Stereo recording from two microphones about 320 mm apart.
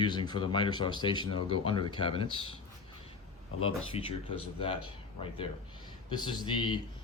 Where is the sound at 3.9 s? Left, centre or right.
Centre.